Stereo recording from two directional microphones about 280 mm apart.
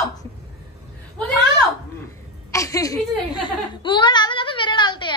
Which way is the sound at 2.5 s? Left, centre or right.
Centre.